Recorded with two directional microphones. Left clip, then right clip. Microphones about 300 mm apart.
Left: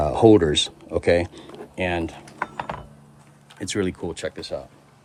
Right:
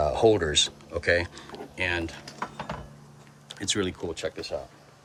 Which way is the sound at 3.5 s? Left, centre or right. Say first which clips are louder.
Left 2 dB; centre.